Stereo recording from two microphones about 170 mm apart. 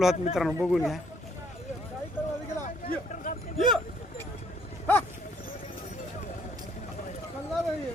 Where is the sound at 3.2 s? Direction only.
50° left (ahead or behind).